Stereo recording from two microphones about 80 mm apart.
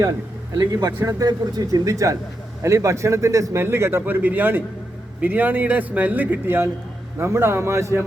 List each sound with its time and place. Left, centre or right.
0.5 s a man's voice: right